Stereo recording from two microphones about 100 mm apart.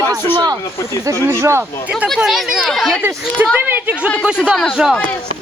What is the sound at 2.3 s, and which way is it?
Speech, 5° right (ahead or behind).